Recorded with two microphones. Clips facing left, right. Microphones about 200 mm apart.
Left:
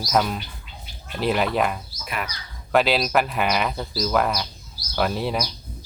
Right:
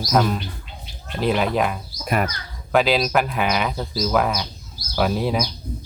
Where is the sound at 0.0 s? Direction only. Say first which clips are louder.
Right 3 dB; centre (ahead or behind).